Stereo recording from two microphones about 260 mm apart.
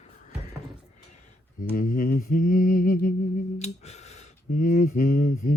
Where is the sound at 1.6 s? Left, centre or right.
Left.